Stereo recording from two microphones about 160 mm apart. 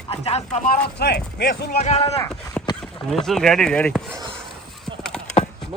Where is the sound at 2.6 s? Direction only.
5° left (ahead or behind).